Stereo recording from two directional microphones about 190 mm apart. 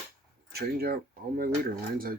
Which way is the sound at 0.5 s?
55° right (ahead or behind).